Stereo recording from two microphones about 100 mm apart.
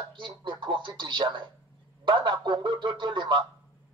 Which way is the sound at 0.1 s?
55° right (ahead or behind).